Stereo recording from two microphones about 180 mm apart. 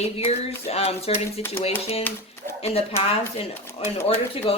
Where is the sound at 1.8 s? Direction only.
35° left (ahead or behind).